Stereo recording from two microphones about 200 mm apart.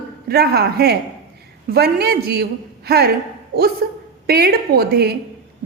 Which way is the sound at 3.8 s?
50° right (ahead or behind).